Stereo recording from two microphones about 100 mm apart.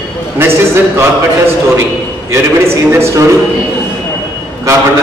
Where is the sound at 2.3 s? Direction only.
25° right (ahead or behind).